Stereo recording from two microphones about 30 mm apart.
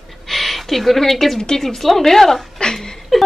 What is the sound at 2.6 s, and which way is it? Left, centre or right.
Chuckle, left.